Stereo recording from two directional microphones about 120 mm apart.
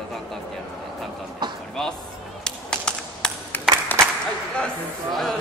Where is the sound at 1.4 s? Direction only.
35° right (ahead or behind).